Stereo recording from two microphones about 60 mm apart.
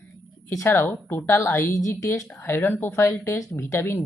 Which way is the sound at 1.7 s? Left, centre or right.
Left.